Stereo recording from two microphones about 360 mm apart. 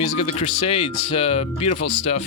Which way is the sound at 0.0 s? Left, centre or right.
Centre.